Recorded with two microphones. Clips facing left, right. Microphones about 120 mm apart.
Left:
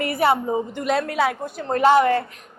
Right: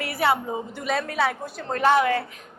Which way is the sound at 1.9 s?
Centre (ahead or behind).